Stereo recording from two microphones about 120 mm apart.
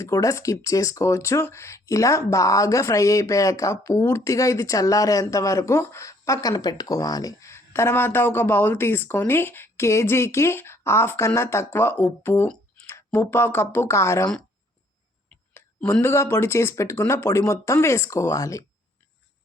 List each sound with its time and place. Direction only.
0.0 s speech: 25° left (ahead or behind)
15.5 s speech: 15° left (ahead or behind)